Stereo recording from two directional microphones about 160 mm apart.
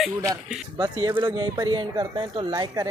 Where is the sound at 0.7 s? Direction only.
25° right (ahead or behind).